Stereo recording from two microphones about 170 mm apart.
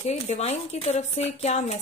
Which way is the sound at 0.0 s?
40° left (ahead or behind).